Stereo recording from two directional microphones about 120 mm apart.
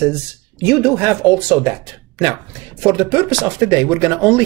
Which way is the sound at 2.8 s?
15° right (ahead or behind).